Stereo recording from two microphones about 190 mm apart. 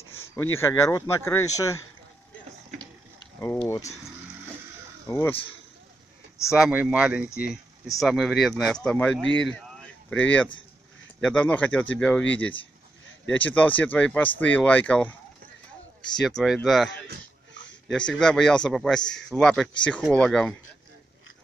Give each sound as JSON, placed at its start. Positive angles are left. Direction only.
{"t": 0.6, "sound": "speech", "side_deg": 15}
{"t": 3.6, "sound": "speech", "side_deg": 15}
{"t": 5.0, "sound": "speech", "side_deg": 15}
{"t": 6.5, "sound": "speech", "side_deg": -5}
{"t": 9.4, "sound": "a sound", "side_deg": 5}
{"t": 11.2, "sound": "speech", "side_deg": 5}
{"t": 16.2, "sound": "speech", "side_deg": 0}